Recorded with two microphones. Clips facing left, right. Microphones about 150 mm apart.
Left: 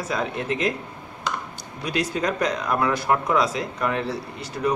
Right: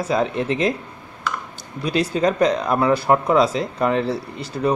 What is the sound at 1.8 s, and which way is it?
Speech, 30° right (ahead or behind).